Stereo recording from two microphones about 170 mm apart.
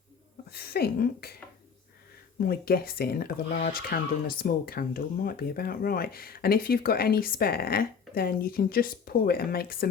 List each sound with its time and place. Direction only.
0.5 s speech: 65° left (ahead or behind)
2.4 s speech: 65° left (ahead or behind)